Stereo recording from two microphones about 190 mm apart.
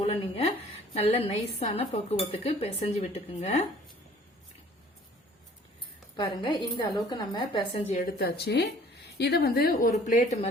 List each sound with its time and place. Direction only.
0.0 s a sound: 35° left (ahead or behind)
0.9 s cutlery: 35° left (ahead or behind)
6.1 s a woman's voice: 25° left (ahead or behind)
7.9 s a woman's voice: 50° left (ahead or behind)
9.9 s cutlery: 35° left (ahead or behind)